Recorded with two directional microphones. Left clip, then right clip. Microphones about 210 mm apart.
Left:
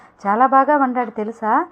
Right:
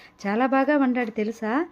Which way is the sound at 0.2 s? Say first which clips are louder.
Left 9 dB; 30° right (ahead or behind).